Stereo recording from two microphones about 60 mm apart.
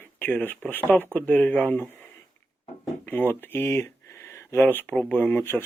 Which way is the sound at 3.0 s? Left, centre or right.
Left.